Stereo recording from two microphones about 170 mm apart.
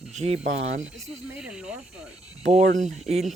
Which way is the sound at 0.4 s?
90° right.